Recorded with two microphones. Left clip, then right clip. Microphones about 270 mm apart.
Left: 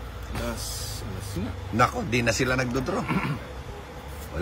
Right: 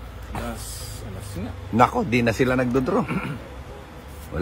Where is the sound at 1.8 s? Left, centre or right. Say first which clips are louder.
Right 4 dB; centre.